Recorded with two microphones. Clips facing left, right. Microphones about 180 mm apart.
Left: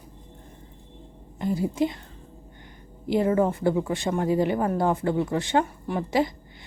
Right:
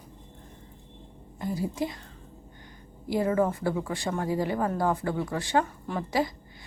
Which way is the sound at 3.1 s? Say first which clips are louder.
Left 3 dB; 25° left (ahead or behind).